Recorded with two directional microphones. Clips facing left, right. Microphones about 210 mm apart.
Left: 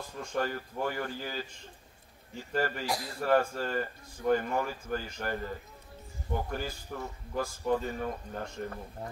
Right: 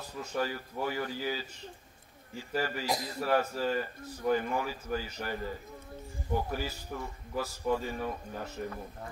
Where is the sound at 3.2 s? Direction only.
50° left (ahead or behind).